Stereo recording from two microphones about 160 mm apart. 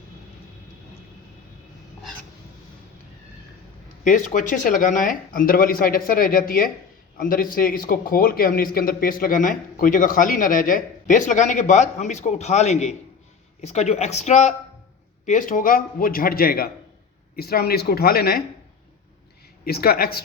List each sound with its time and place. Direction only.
4.0 s a man's voice: 55° left (ahead or behind)
15.3 s a man's voice: 55° left (ahead or behind); by 18.4 s 75° left (ahead or behind)
19.6 s speech: 75° left (ahead or behind)